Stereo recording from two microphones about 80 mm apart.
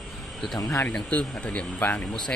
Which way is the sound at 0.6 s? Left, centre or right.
Left.